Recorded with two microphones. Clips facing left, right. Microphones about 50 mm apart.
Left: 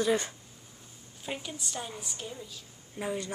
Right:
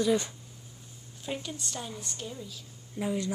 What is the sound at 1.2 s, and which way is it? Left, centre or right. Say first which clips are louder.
A woman's voice: right 1 dB; centre.